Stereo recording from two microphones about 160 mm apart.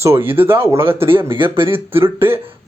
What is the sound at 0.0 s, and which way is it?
Speech, 15° right (ahead or behind).